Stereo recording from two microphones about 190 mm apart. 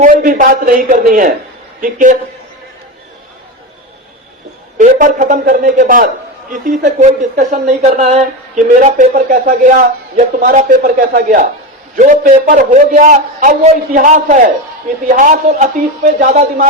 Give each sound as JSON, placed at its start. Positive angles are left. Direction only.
{"t": 0.0, "sound": "a man's voice", "side_deg": -45}
{"t": 4.8, "sound": "a man's voice", "side_deg": -40}